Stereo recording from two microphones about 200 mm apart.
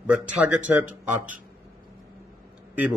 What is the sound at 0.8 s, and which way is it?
Speech, 40° right (ahead or behind).